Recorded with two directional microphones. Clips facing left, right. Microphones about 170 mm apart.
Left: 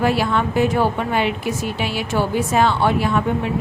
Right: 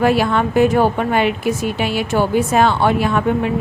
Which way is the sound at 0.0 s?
55° right (ahead or behind).